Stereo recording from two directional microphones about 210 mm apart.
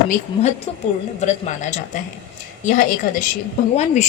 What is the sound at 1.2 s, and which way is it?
Speech, 35° left (ahead or behind).